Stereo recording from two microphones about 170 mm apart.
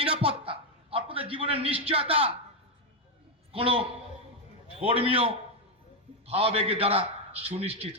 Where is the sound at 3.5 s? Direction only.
35° right (ahead or behind).